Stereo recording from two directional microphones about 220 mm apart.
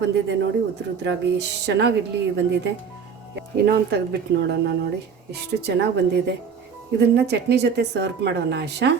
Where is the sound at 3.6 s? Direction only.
45° right (ahead or behind).